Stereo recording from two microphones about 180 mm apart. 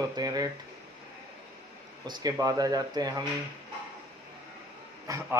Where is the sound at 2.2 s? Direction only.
20° right (ahead or behind).